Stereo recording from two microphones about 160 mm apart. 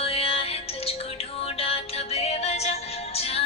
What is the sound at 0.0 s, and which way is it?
Music, 35° left (ahead or behind).